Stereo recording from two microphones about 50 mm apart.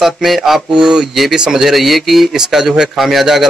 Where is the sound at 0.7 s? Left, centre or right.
Centre.